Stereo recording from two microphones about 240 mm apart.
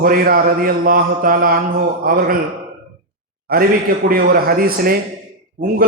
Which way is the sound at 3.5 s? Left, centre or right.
Right.